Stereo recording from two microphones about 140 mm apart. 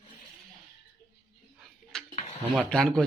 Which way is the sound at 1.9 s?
5° left (ahead or behind).